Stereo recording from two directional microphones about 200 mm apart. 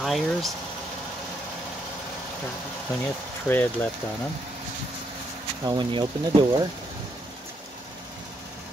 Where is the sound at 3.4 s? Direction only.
10° left (ahead or behind).